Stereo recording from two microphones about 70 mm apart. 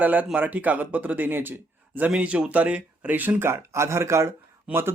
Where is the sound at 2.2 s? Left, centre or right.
Centre.